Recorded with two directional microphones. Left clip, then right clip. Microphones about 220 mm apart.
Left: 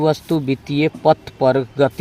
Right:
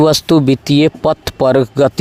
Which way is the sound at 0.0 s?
45° right (ahead or behind).